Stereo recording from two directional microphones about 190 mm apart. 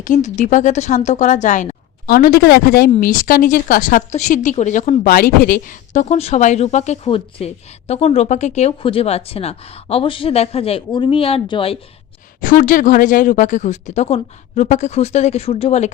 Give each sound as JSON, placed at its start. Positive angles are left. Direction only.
{"t": 0.0, "sound": "speech", "side_deg": 40}
{"t": 12.4, "sound": "speech", "side_deg": 45}